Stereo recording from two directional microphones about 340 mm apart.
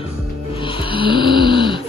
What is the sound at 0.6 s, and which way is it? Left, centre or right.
Snoring, centre.